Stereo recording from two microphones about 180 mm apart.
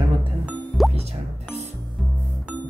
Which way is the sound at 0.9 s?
35° right (ahead or behind).